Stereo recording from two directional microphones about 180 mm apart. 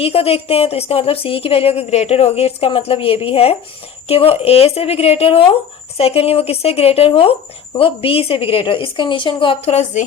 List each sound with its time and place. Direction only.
0.0 s speech: 35° left (ahead or behind)